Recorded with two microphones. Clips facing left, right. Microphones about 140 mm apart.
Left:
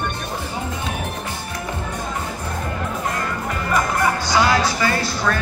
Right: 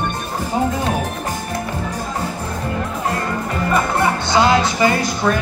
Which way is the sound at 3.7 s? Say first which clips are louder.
Right 2 dB; 25° right (ahead or behind).